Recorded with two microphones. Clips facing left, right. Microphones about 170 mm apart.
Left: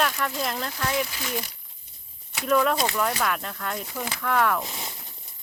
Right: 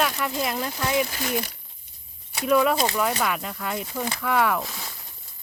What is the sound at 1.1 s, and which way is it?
Speech, 45° right (ahead or behind).